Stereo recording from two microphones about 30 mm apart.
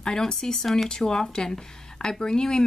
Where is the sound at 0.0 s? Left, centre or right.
Centre.